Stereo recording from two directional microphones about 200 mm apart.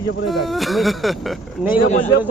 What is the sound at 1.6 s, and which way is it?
Speech, 40° left (ahead or behind).